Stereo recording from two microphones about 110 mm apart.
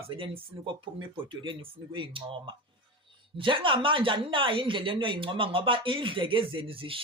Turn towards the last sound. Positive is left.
turn(degrees=-55)  # may be behind; listen again after turning